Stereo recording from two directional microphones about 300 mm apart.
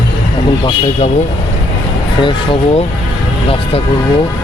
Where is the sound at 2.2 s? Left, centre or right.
Centre.